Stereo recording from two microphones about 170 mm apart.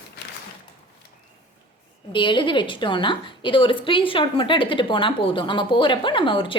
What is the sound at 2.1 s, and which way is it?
A woman's voice, 30° left (ahead or behind).